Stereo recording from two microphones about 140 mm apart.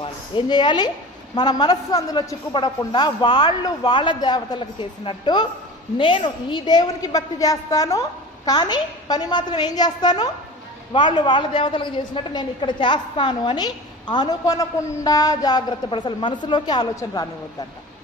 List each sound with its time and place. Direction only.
0.0 s a woman's voice: 35° left (ahead or behind)